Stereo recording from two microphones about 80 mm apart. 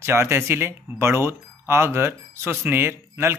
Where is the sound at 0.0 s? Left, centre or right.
Right.